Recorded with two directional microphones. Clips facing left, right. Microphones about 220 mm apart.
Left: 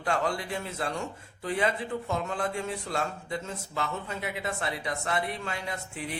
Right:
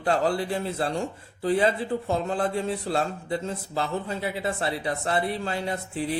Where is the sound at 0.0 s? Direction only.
35° right (ahead or behind).